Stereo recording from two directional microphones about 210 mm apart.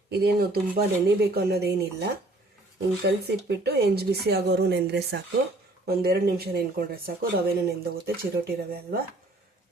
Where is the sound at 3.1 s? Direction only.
50° right (ahead or behind).